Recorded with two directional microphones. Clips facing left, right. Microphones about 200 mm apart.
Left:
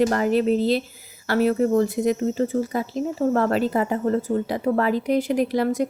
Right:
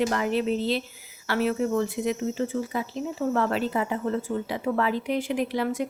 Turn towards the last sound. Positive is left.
turn(degrees=40)  # may be behind; listen again after turning